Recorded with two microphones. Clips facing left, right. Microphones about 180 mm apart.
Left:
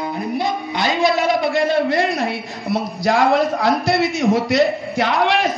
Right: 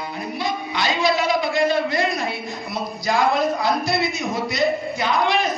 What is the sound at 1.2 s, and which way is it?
A man's voice, 60° left (ahead or behind).